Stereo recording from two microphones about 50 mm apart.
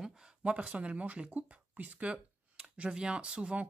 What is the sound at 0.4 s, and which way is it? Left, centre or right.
Speech, right.